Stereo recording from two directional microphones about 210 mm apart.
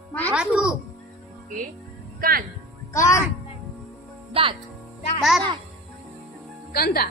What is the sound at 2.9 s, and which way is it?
Speech, 15° left (ahead or behind).